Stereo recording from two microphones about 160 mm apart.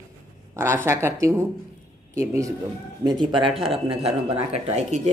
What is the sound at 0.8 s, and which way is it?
A woman's voice, 15° right (ahead or behind).